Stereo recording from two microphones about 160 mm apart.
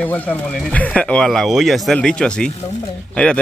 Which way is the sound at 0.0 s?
10° left (ahead or behind).